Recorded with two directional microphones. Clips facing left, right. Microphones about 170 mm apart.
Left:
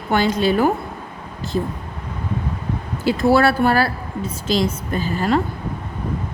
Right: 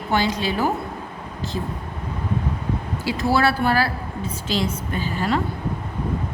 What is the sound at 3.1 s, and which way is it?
A woman's voice, 50° left (ahead or behind).